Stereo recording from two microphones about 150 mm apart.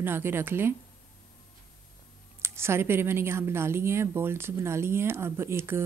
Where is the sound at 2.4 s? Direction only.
15° right (ahead or behind).